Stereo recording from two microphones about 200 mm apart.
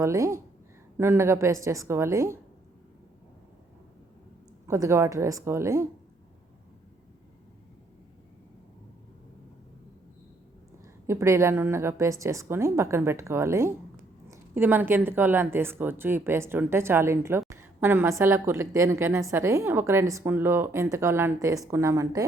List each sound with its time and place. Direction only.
0.0 s a woman's voice: 15° right (ahead or behind)
4.6 s a woman's voice: 15° right (ahead or behind)
11.0 s a woman's voice: 15° right (ahead or behind)